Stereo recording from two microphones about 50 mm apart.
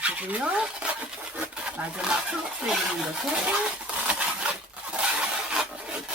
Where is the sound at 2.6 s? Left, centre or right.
Centre.